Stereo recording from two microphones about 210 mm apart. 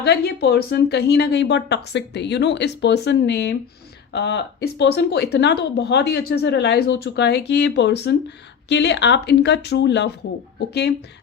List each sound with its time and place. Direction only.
0.0 s speech: 50° left (ahead or behind)